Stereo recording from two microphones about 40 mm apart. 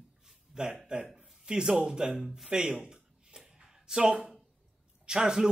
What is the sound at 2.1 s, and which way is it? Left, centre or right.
Speech, centre.